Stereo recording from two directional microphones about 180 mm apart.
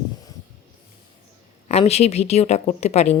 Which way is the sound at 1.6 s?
35° left (ahead or behind).